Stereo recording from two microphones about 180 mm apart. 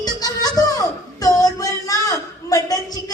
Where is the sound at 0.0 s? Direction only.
20° left (ahead or behind).